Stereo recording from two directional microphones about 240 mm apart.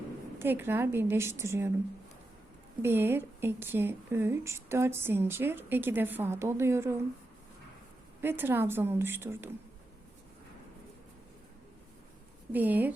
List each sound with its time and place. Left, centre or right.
0.3 s a woman's voice: centre
2.8 s a woman's voice: centre
8.2 s a woman's voice: centre
12.5 s a woman's voice: centre